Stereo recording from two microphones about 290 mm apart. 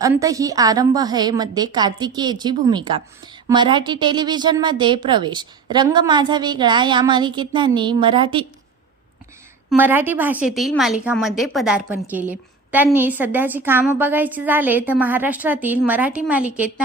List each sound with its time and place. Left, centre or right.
0.0 s a woman's voice: centre
9.6 s a woman's voice: centre